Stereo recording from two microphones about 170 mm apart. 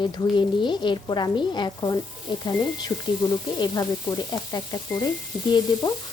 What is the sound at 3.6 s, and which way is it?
Frying, 25° left (ahead or behind).